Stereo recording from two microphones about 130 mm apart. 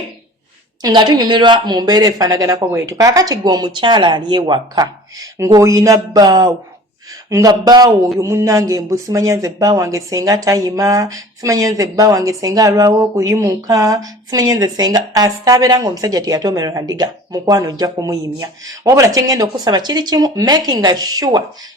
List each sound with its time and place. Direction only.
0.8 s speech: 30° right (ahead or behind)